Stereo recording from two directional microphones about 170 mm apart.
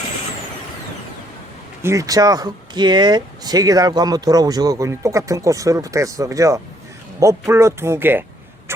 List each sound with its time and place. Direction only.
1.8 s speech: 15° right (ahead or behind)